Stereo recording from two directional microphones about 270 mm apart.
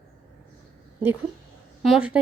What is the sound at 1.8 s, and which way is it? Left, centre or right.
Speech, centre.